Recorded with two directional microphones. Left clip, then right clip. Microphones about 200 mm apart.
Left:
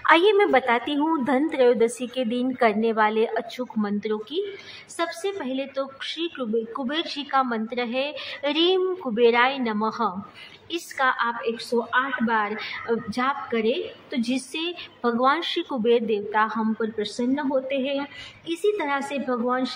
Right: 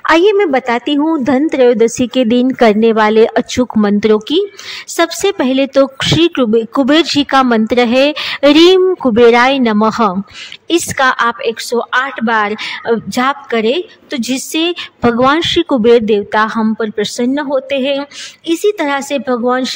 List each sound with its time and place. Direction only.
0.0 s a woman's voice: 35° right (ahead or behind); by 19.7 s 55° right (ahead or behind)